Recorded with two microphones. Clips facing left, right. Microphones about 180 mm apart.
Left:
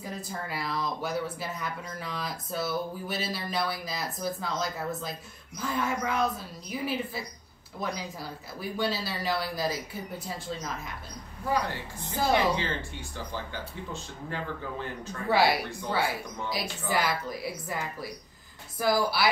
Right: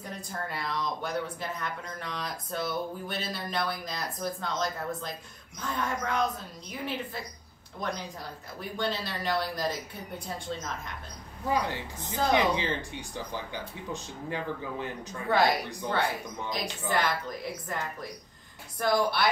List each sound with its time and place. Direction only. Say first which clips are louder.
0.0 s a woman's voice: left 1 dB; 5° left (ahead or behind)
11.5 s speech: even; 15° right (ahead or behind)
15.2 s a woman's voice: left 1 dB; 5° left (ahead or behind)